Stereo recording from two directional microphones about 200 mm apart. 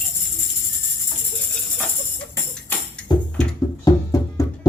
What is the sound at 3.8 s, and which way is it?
Music, 15° left (ahead or behind).